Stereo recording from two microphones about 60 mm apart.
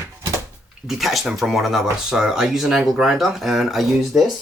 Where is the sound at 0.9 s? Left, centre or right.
Centre.